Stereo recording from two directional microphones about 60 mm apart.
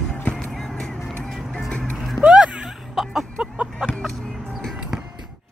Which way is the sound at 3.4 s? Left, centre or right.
Centre.